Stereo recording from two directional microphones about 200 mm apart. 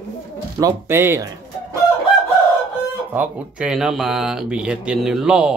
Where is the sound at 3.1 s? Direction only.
5° right (ahead or behind).